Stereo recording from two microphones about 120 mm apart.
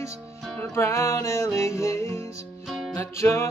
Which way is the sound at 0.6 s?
25° left (ahead or behind).